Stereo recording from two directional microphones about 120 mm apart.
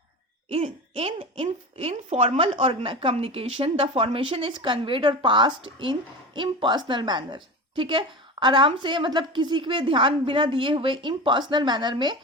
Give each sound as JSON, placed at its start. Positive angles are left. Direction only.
{"t": 0.5, "sound": "speech", "side_deg": -55}
{"t": 2.4, "sound": "a woman's voice", "side_deg": -50}